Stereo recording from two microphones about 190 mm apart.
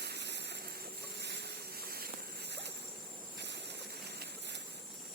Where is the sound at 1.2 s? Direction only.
60° right (ahead or behind).